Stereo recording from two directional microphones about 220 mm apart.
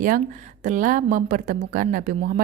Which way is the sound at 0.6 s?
35° right (ahead or behind).